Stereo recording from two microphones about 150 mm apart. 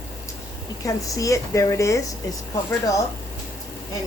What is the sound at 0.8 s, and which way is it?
Speech, 20° left (ahead or behind).